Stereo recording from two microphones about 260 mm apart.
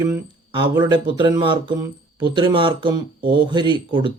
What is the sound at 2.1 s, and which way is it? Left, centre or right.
Speech, centre.